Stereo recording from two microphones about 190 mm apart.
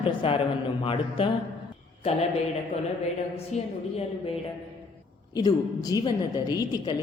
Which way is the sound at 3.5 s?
35° left (ahead or behind).